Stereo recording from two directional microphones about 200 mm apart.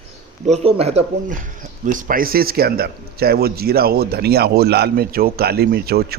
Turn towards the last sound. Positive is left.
turn(degrees=-50)  # may be behind; listen again after turning